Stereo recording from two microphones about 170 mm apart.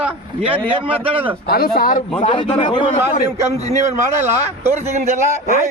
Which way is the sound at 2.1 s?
30° left (ahead or behind).